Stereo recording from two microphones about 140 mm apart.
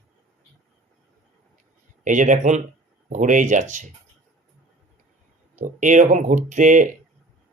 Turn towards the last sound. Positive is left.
turn(degrees=-65)  # may be behind; listen again after turning